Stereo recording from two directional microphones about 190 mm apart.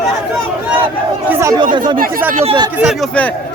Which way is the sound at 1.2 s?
15° right (ahead or behind).